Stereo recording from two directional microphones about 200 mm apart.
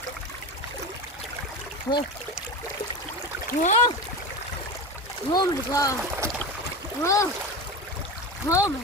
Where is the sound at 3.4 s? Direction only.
40° left (ahead or behind).